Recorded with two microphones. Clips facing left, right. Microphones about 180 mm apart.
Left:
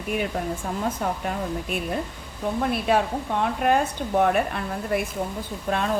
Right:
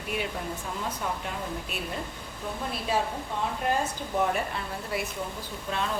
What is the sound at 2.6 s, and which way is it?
Speech, 65° left (ahead or behind).